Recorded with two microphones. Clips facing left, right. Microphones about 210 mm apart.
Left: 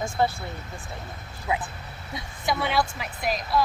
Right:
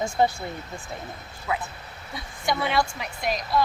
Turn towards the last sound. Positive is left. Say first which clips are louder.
# even
turn(degrees=0)  # may be behind; listen again after turning